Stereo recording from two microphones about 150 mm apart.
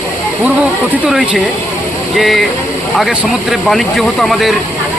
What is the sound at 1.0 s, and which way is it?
Speech, 5° right (ahead or behind).